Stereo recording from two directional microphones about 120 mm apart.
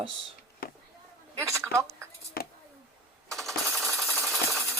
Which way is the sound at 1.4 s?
25° right (ahead or behind).